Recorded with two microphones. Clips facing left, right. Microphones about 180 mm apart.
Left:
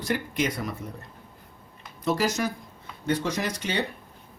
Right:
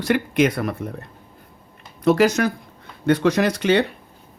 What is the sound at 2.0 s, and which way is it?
Speech, 70° right (ahead or behind).